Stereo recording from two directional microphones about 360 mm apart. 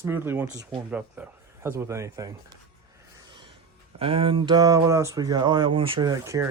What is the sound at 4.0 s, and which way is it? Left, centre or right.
Speech, centre.